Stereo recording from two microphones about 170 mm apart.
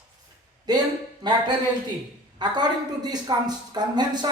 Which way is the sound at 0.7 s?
25° right (ahead or behind).